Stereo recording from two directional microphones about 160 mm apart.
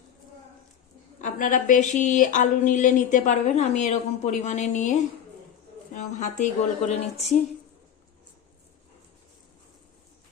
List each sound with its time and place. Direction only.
1.2 s speech: 55° left (ahead or behind)